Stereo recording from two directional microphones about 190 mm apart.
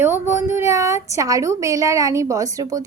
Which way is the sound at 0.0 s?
10° right (ahead or behind).